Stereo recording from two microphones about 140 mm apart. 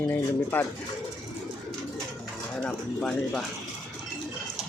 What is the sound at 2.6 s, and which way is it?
Speech, 5° left (ahead or behind).